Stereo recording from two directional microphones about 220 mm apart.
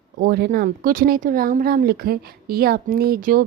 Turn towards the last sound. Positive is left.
turn(degrees=-40)  # may be behind; listen again after turning